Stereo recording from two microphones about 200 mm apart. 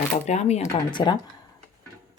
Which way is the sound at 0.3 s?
35° left (ahead or behind).